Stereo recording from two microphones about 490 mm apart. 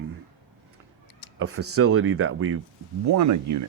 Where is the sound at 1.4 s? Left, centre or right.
Right.